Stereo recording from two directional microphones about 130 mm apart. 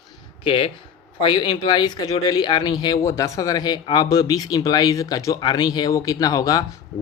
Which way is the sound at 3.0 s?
25° left (ahead or behind).